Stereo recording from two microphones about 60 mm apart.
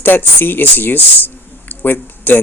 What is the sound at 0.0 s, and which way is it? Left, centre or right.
Speech, left.